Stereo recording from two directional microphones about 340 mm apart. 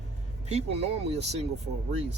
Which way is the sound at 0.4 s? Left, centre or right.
Centre.